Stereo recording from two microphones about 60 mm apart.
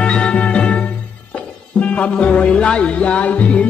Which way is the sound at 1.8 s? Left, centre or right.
Left.